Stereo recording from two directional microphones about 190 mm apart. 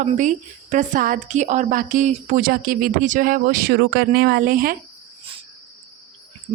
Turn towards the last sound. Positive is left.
turn(degrees=-45)  # may be behind; listen again after turning